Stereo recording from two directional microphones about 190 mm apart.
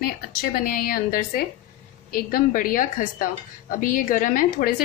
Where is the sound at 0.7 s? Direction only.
50° left (ahead or behind).